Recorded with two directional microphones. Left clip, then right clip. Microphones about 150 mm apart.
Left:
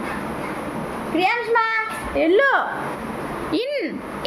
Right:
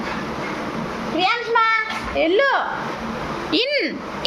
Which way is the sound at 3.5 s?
5° left (ahead or behind).